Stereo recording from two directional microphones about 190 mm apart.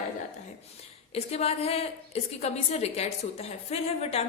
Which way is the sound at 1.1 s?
35° left (ahead or behind).